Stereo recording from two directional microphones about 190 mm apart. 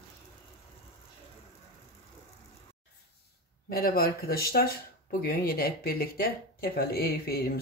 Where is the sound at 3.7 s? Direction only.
50° left (ahead or behind).